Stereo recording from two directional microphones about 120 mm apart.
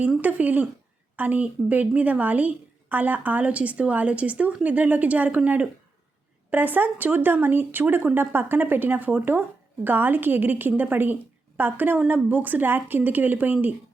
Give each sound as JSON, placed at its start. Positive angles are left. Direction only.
{"t": 0.2, "sound": "a woman's voice", "side_deg": -15}